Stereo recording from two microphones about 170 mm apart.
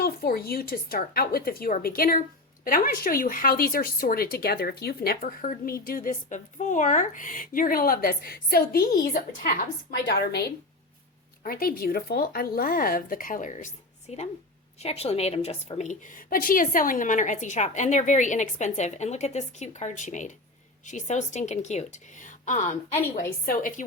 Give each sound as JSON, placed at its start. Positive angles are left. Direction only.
{"t": 0.0, "sound": "a woman's voice", "side_deg": 60}
{"t": 10.1, "sound": "a woman's voice", "side_deg": 65}
{"t": 11.4, "sound": "a woman's voice", "side_deg": 60}
{"t": 23.1, "sound": "a woman's voice", "side_deg": 55}